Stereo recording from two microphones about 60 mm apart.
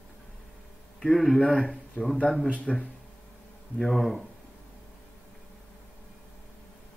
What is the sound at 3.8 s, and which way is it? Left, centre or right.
Speech, centre.